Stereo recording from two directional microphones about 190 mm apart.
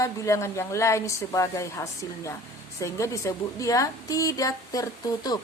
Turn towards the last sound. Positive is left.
turn(degrees=20)  # may be behind; listen again after turning